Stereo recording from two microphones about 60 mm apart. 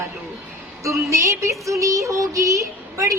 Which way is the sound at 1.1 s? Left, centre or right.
Right.